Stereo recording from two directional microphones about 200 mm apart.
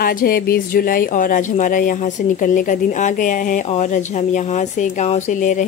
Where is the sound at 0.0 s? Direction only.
45° left (ahead or behind).